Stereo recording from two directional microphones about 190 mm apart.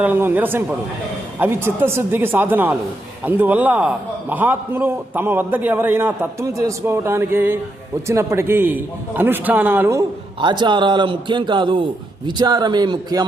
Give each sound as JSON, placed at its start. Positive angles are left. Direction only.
{"t": 0.0, "sound": "a man's voice", "side_deg": -10}
{"t": 10.4, "sound": "a man's voice", "side_deg": -25}